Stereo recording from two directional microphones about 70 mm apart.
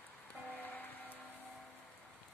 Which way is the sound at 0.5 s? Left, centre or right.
Left.